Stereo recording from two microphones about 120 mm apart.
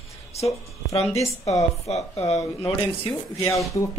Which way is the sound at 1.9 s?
65° left (ahead or behind).